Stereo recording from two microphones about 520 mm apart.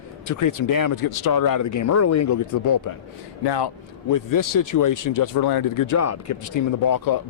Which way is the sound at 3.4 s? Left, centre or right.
Left.